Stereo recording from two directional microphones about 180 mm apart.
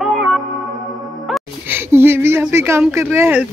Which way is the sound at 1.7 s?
10° right (ahead or behind).